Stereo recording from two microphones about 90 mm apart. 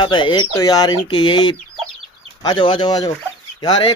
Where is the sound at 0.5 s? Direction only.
45° left (ahead or behind).